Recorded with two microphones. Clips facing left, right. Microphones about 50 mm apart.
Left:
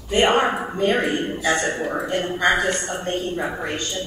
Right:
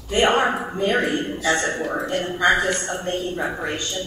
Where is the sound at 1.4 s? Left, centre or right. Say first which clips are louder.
Even; left.